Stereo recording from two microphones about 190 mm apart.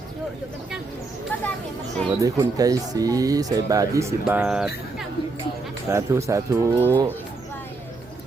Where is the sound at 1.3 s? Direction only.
10° left (ahead or behind).